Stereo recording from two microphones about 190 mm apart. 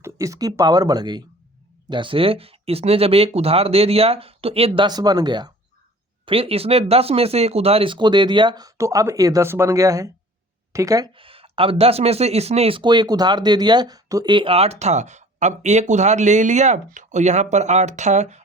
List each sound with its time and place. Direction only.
0.0 s speech: 15° right (ahead or behind); by 18.4 s 35° right (ahead or behind)